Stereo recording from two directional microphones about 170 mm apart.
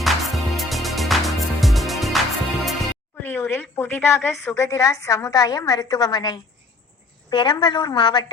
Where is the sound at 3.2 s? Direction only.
15° left (ahead or behind).